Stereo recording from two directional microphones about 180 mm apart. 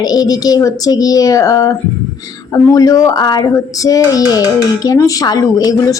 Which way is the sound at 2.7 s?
20° left (ahead or behind).